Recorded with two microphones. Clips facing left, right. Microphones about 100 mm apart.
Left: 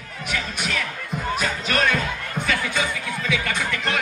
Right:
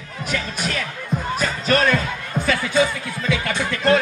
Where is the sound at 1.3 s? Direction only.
40° right (ahead or behind).